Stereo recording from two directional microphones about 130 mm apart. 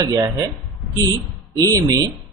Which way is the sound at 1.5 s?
30° right (ahead or behind).